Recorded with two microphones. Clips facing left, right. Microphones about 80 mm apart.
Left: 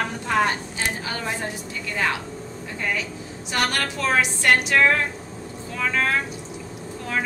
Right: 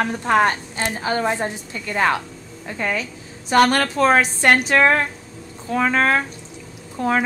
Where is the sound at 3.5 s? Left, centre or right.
Right.